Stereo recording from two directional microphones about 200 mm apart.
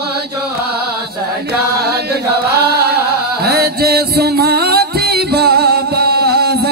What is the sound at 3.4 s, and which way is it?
Music, 50° right (ahead or behind).